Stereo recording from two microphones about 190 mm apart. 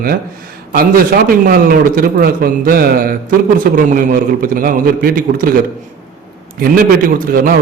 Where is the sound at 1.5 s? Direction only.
50° right (ahead or behind).